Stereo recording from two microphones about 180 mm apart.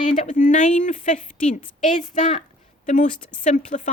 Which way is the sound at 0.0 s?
45° left (ahead or behind).